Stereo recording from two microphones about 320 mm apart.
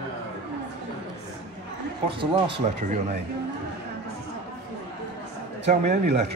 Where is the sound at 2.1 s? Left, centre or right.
Centre.